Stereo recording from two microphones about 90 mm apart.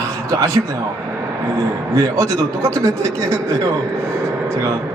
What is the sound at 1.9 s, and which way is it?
A man's voice, 35° right (ahead or behind).